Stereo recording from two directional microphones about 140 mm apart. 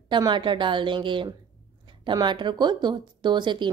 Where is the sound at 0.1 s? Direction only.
35° right (ahead or behind).